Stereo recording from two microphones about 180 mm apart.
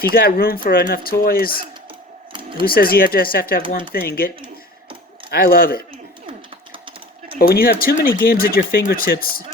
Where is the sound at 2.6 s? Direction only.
55° left (ahead or behind).